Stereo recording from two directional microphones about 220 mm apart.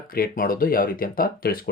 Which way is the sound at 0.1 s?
40° left (ahead or behind).